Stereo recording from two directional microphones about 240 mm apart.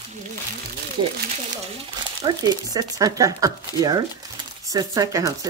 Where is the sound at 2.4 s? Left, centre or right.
Centre.